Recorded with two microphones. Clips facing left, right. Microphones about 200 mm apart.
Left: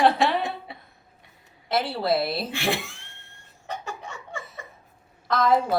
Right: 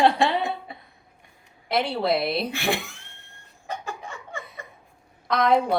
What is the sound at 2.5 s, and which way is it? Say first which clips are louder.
Speech: even; 25° left (ahead or behind).